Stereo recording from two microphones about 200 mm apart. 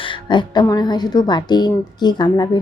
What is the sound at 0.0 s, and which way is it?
A woman's voice, 25° left (ahead or behind).